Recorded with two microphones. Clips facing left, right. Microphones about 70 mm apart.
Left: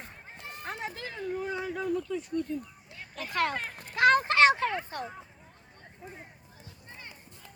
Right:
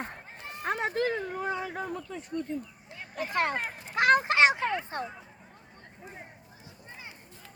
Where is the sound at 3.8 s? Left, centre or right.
Centre.